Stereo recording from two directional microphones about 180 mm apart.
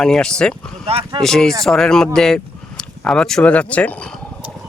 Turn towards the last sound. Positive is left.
turn(degrees=5)  # may be behind; listen again after turning